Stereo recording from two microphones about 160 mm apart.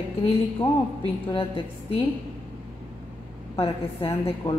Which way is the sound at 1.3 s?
35° left (ahead or behind).